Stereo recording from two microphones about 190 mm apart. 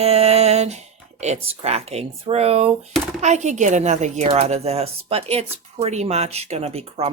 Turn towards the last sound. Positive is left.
turn(degrees=-35)  # may be behind; listen again after turning